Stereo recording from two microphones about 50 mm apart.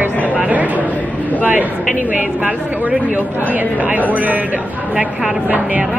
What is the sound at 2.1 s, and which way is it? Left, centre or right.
A woman's voice, right.